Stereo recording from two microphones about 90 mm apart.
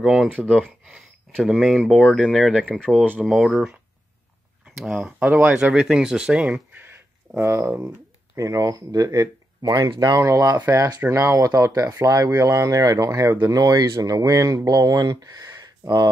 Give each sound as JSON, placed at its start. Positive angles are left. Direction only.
{"t": 0.0, "sound": "speech", "side_deg": -5}
{"t": 0.3, "sound": "speech", "side_deg": 10}
{"t": 3.0, "sound": "speech", "side_deg": -15}
{"t": 4.6, "sound": "speech", "side_deg": -5}
{"t": 5.7, "sound": "speech", "side_deg": -5}
{"t": 6.7, "sound": "a sound", "side_deg": -25}
{"t": 8.4, "sound": "speech", "side_deg": -40}